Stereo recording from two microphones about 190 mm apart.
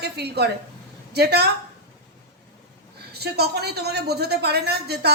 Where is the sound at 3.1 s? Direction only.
60° right (ahead or behind).